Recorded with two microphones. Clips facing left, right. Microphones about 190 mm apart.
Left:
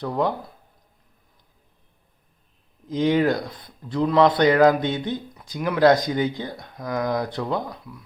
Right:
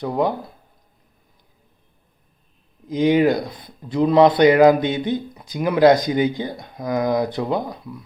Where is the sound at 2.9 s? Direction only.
10° right (ahead or behind).